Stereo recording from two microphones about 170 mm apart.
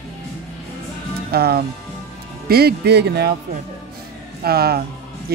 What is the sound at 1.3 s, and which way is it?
Speech, 65° right (ahead or behind).